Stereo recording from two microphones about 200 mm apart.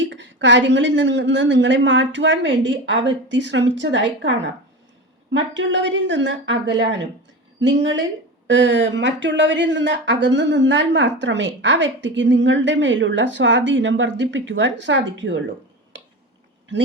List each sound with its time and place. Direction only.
0.0 s speech: 65° right (ahead or behind)